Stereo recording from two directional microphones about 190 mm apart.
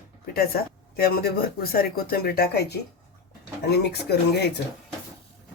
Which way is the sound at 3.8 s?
60° left (ahead or behind).